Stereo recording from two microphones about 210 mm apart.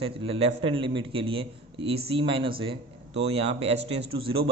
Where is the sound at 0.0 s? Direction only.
25° right (ahead or behind).